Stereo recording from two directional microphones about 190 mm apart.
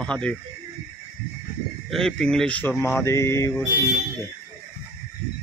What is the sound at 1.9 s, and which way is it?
Speech, 5° left (ahead or behind).